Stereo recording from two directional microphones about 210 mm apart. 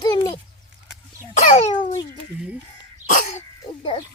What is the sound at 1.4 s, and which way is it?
Speech, 35° left (ahead or behind).